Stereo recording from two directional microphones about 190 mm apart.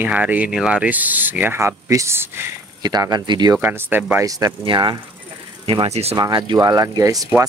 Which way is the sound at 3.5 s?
10° right (ahead or behind).